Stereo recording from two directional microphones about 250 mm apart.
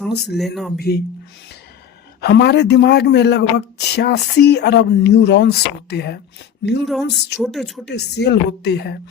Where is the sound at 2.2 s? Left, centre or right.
Left.